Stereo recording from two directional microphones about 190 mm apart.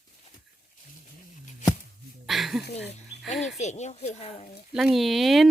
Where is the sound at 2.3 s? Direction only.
Centre (ahead or behind).